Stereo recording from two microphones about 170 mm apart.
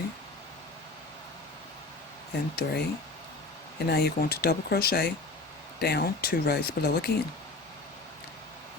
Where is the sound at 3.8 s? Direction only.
70° left (ahead or behind).